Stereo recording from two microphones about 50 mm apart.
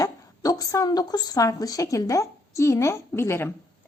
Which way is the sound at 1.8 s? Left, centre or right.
Left.